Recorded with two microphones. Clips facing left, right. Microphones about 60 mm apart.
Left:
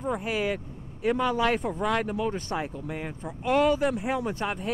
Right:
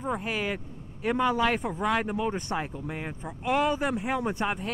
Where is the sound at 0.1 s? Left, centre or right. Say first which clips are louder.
Left 2 dB; centre.